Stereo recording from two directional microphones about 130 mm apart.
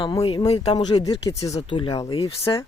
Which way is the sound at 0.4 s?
55° left (ahead or behind).